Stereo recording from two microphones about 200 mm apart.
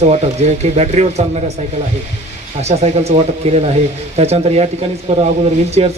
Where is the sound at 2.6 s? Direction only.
35° right (ahead or behind).